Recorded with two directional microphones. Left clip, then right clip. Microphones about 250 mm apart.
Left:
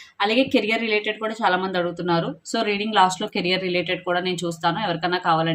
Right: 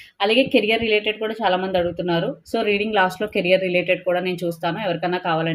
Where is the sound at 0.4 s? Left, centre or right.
Left.